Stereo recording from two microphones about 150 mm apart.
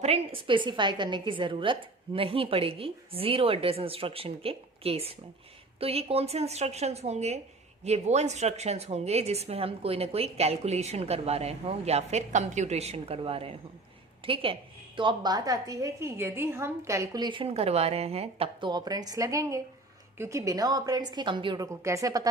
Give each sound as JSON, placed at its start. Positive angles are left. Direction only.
{"t": 0.0, "sound": "a woman's voice", "side_deg": -40}
{"t": 18.7, "sound": "a woman's voice", "side_deg": -25}